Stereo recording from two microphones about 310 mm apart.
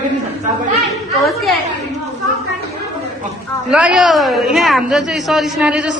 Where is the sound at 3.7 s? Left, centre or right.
Centre.